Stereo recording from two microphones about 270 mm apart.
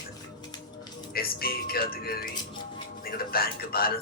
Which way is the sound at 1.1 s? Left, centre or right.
Left.